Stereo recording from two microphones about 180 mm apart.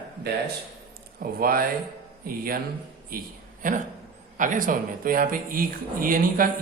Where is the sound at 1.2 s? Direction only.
55° right (ahead or behind).